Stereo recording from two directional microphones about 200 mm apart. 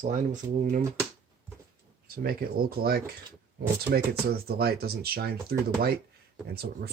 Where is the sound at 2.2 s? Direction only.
50° right (ahead or behind).